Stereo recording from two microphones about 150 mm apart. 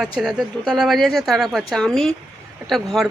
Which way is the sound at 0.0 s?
5° right (ahead or behind).